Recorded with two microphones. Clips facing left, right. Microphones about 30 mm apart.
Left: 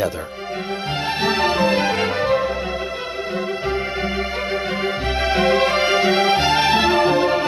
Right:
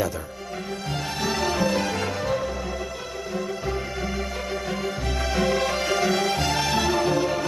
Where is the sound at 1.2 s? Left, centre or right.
Left.